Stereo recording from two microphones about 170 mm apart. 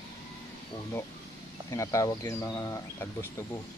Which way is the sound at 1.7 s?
20° left (ahead or behind).